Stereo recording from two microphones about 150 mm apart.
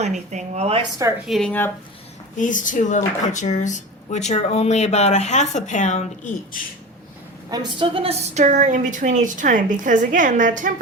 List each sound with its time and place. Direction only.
0.0 s speech: 50° right (ahead or behind)
0.8 s speech: 25° right (ahead or behind)
1.3 s speech: 5° left (ahead or behind)
2.4 s speech: 60° left (ahead or behind)
7.5 s a woman's voice: 30° right (ahead or behind); by 10.7 s 60° right (ahead or behind)